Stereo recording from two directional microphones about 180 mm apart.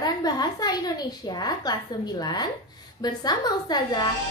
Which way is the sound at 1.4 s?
20° left (ahead or behind).